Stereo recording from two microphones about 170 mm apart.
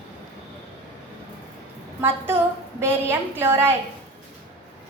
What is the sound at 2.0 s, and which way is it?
A woman's voice, 10° right (ahead or behind).